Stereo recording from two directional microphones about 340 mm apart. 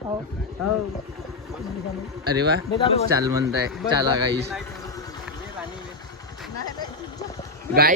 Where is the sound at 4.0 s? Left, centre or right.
Centre.